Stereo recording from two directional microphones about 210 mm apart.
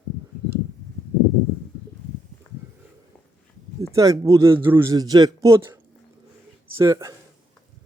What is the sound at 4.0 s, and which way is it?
A man's voice, 15° right (ahead or behind).